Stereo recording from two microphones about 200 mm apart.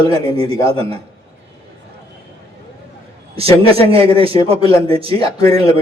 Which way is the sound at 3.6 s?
30° right (ahead or behind).